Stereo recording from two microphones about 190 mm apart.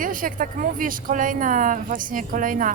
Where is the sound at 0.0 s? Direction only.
45° right (ahead or behind).